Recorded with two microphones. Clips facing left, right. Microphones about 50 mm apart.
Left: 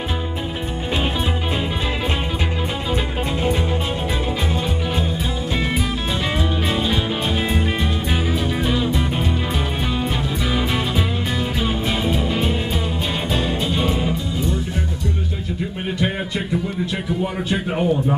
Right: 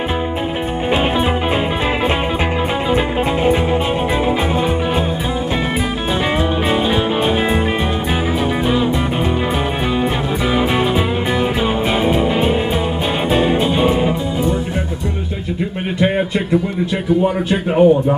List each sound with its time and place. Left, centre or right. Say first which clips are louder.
8.6 s music: right 5 dB; centre
12.1 s music: right 6 dB; right
17.2 s a man's voice: right 6 dB; right